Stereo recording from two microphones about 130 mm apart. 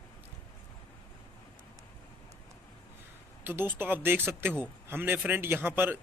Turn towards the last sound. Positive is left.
turn(degrees=-15)  # may be behind; listen again after turning